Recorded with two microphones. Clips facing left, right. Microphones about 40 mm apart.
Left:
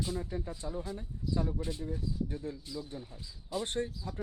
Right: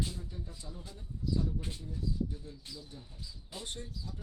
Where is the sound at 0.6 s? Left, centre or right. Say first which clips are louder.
Left 10 dB; left.